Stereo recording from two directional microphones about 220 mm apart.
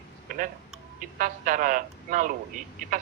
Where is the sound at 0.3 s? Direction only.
40° right (ahead or behind).